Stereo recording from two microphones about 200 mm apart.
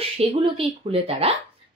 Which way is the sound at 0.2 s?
30° right (ahead or behind).